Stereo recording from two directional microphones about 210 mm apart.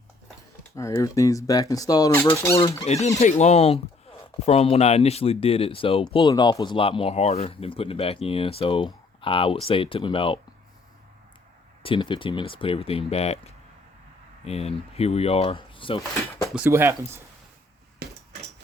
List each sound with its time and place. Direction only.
0.8 s speech: 15° left (ahead or behind)
2.8 s speech: 30° left (ahead or behind)
11.8 s speech: 25° left (ahead or behind)
16.6 s speech: 10° right (ahead or behind)
18.0 s a sound: 45° right (ahead or behind)